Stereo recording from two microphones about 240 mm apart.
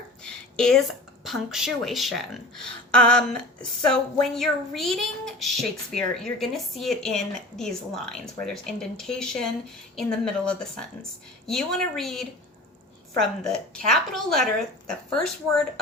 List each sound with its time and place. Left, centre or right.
0.2 s a woman's voice: centre
13.4 s a woman's voice: centre